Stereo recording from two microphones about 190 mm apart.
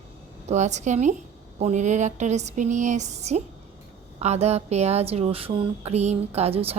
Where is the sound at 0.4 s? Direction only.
35° right (ahead or behind).